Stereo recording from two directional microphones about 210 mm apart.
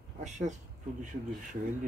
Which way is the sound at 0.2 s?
35° right (ahead or behind).